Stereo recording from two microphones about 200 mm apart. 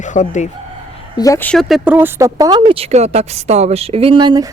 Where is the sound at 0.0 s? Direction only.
40° left (ahead or behind).